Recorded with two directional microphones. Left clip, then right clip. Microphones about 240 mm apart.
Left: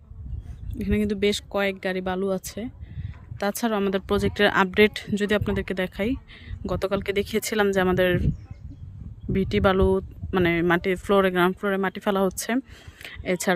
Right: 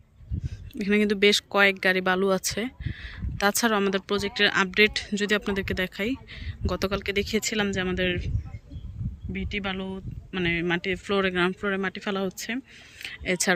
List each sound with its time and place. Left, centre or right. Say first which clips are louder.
0.7 s speech: right 3 dB; centre
9.3 s speech: left 10 dB; left